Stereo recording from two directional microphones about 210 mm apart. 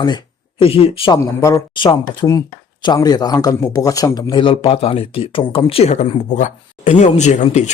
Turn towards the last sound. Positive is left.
turn(degrees=35)  # may be behind; listen again after turning